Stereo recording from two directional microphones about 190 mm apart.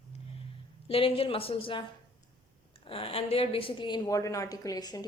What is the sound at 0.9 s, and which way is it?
Speech, 30° left (ahead or behind).